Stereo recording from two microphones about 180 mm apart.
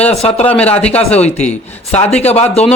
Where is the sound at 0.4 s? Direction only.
5° left (ahead or behind).